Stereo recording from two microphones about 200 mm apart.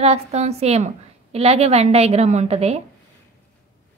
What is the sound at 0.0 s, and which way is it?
A woman's voice, 30° right (ahead or behind).